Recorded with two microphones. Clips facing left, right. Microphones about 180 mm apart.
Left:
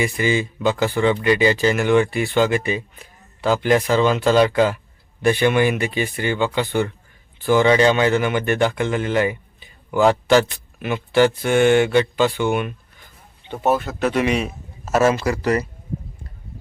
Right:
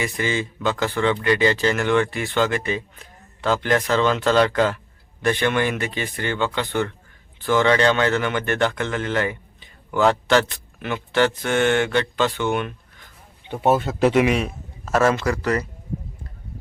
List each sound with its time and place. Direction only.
0.0 s speech: 10° left (ahead or behind)
13.4 s speech: 15° right (ahead or behind)
14.3 s speech: centre (ahead or behind)